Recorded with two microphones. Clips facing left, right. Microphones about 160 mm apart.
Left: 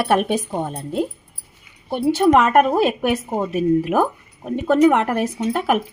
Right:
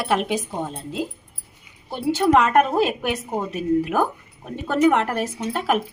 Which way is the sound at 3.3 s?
10° left (ahead or behind).